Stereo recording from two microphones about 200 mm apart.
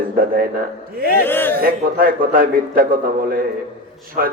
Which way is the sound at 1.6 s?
45° right (ahead or behind).